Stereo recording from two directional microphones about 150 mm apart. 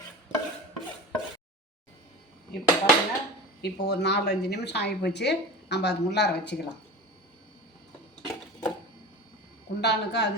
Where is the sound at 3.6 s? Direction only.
90° left.